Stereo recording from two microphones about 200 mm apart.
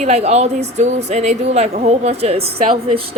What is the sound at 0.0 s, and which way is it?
A woman's voice, 30° right (ahead or behind).